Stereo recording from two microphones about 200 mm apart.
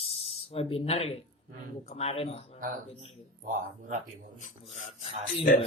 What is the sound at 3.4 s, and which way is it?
Speech, 40° right (ahead or behind).